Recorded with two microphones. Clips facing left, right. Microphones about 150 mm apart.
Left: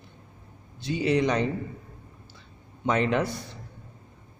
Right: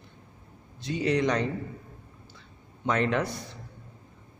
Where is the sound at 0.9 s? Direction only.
5° left (ahead or behind).